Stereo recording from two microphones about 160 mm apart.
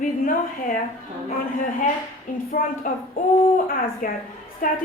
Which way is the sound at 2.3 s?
55° left (ahead or behind).